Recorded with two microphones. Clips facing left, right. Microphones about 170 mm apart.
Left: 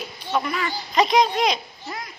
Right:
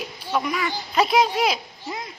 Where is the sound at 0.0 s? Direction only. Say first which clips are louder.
Even; 10° right (ahead or behind).